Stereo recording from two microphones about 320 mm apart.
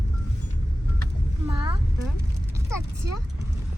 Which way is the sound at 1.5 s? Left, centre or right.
Centre.